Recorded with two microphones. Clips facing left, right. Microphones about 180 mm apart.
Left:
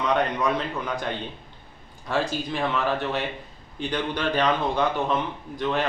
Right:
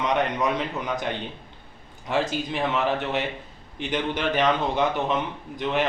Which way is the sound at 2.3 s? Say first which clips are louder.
Right 1 dB; 20° right (ahead or behind).